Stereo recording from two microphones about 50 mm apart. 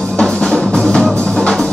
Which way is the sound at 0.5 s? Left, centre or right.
Centre.